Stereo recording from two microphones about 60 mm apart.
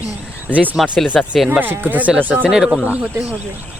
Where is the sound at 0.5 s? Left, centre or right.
Right.